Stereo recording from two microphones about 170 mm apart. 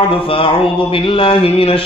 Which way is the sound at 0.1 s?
30° left (ahead or behind).